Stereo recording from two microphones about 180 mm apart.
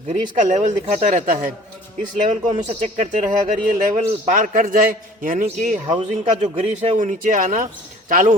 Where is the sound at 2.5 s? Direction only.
40° right (ahead or behind).